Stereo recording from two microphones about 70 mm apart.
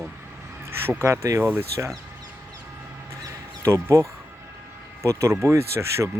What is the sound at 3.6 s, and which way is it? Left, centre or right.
Speech, right.